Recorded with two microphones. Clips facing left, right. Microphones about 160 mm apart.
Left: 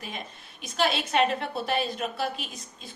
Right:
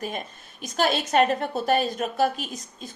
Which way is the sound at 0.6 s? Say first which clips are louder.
Right 3 dB; 45° right (ahead or behind).